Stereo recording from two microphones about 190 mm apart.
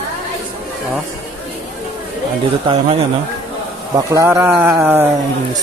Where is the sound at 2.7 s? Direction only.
25° right (ahead or behind).